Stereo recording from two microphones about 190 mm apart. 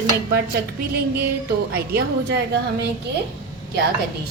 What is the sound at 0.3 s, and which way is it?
A woman's voice, 55° right (ahead or behind).